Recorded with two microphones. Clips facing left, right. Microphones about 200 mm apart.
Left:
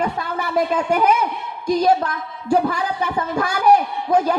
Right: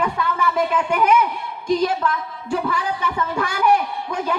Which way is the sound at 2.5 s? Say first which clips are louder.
Left 4 dB; 40° left (ahead or behind).